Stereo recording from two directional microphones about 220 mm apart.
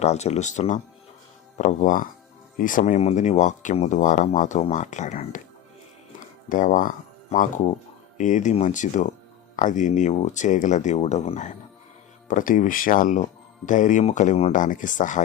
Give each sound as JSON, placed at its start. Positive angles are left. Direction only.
{"t": 0.0, "sound": "speech", "side_deg": 30}
{"t": 6.5, "sound": "speech", "side_deg": 35}